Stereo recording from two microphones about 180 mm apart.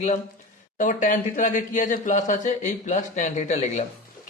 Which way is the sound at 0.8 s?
45° left (ahead or behind).